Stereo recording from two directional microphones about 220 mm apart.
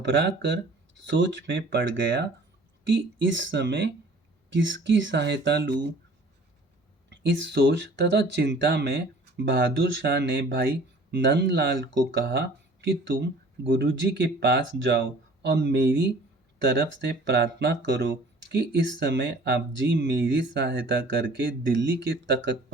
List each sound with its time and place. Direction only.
0.0 s speech: 55° right (ahead or behind)
7.1 s speech: 55° right (ahead or behind)